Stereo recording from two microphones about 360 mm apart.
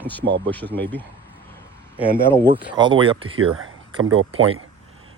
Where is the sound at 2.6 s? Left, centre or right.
Centre.